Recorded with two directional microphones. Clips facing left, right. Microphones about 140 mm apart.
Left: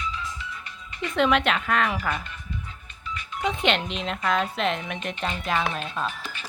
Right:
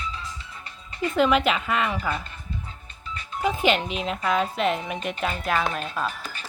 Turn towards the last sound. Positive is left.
turn(degrees=0)  # may be behind; listen again after turning